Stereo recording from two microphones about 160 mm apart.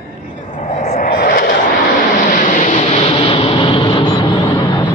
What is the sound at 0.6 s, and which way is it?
Vehicle, 60° left (ahead or behind).